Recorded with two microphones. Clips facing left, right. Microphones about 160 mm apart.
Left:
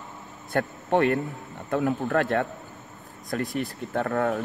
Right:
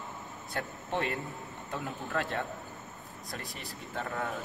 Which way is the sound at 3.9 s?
60° left (ahead or behind).